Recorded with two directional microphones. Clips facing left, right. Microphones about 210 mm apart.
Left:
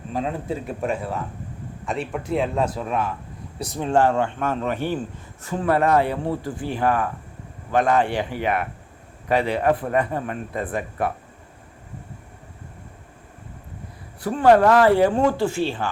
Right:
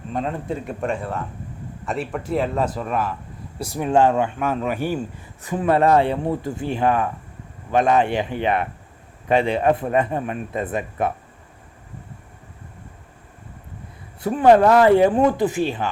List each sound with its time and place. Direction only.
0.1 s speech: 5° left (ahead or behind)
3.8 s a man's voice: 15° right (ahead or behind)
14.2 s a man's voice: 20° right (ahead or behind)